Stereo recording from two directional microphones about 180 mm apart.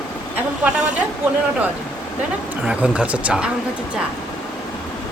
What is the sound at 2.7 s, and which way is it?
Speech, 5° right (ahead or behind).